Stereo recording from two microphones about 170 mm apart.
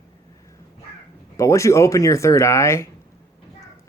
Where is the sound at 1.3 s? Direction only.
20° left (ahead or behind).